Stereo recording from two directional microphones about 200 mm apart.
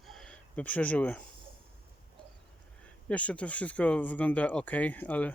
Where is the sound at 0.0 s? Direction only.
Centre (ahead or behind).